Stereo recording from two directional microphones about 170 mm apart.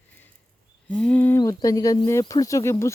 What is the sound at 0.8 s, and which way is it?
Speech, 10° left (ahead or behind).